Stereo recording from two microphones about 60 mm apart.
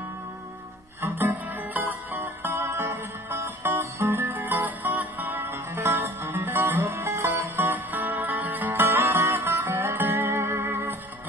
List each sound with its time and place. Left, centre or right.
1.5 s music: right
6.8 s music: right
7.6 s music: right
10.2 s music: right